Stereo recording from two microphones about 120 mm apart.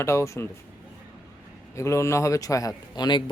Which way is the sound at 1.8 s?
25° left (ahead or behind).